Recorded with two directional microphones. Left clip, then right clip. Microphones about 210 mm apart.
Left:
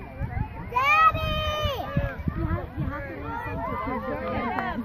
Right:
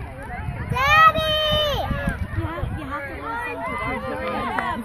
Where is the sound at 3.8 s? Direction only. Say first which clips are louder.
Right 3 dB; 45° right (ahead or behind).